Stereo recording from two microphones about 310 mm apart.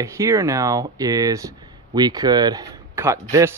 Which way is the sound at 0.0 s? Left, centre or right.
Centre.